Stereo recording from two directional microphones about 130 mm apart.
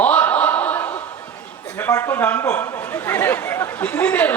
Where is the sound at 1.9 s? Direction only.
20° left (ahead or behind).